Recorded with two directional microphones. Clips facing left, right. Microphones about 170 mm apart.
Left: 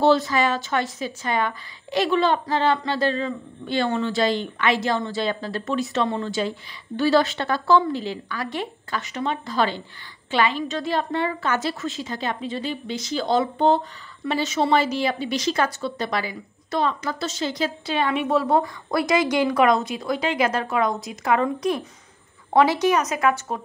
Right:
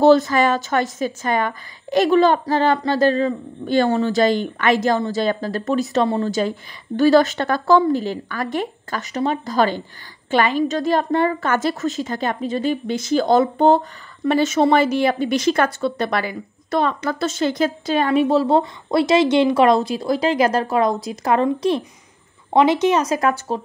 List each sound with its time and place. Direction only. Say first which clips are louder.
0.0 s a woman's voice: right 5 dB; 45° right (ahead or behind)